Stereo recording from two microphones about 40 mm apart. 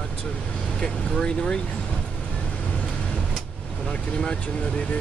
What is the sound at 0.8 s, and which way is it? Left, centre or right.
Speech, left.